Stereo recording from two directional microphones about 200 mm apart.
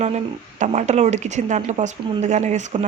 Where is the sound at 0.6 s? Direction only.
35° right (ahead or behind).